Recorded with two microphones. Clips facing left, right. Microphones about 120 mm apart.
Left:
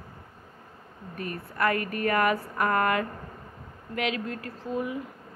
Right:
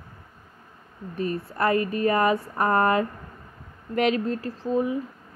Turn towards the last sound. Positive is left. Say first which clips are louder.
# right 6 dB
turn(degrees=-30)  # may be behind; listen again after turning